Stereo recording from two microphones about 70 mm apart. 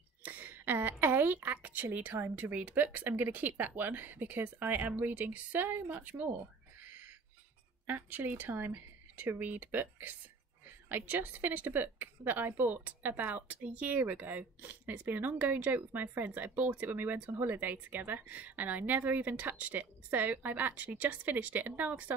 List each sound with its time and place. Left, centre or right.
0.2 s a sound: right
2.3 s a woman's voice: right
7.8 s a woman's voice: right